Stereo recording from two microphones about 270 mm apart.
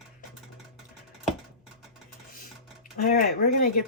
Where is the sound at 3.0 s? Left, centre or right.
Left.